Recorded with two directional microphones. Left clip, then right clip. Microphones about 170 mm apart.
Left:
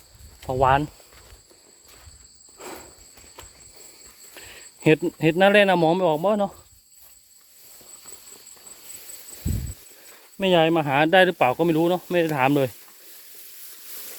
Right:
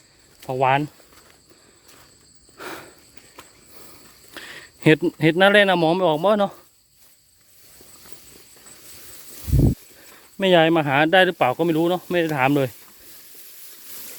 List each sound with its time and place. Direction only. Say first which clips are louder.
0.4 s speech: even; 15° right (ahead or behind)
2.6 s insect: right 4 dB; 30° right (ahead or behind)
4.4 s speech: right 6 dB; 30° right (ahead or behind)
6.3 s speech: right 4 dB; 40° right (ahead or behind)
10.3 s speech: right 3 dB; 35° right (ahead or behind)
10.8 s speech: right 1 dB; 20° right (ahead or behind)